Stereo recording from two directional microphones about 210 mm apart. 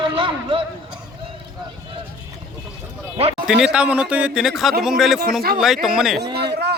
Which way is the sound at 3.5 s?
5° right (ahead or behind).